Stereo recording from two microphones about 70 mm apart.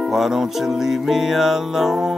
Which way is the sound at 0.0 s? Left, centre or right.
Centre.